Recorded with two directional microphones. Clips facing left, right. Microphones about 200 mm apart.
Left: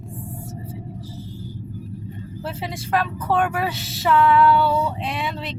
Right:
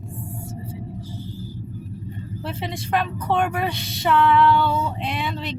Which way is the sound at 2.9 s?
Centre (ahead or behind).